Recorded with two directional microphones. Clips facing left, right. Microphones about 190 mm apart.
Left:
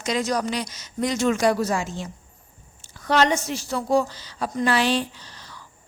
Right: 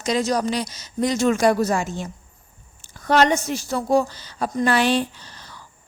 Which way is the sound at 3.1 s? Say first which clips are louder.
Right 3 dB; 50° right (ahead or behind).